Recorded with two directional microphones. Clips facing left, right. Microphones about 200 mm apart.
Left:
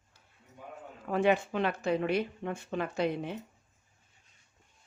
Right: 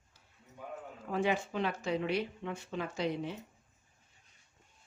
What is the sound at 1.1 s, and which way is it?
Speech, 60° left (ahead or behind).